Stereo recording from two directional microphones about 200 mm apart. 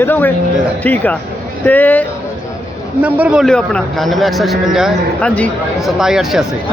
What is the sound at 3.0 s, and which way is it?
A man's voice, 5° right (ahead or behind).